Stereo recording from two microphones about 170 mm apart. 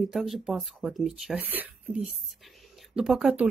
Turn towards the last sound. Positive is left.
turn(degrees=-5)  # may be behind; listen again after turning